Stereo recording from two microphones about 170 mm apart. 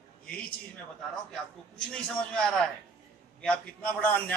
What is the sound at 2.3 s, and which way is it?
A man's voice, 5° left (ahead or behind).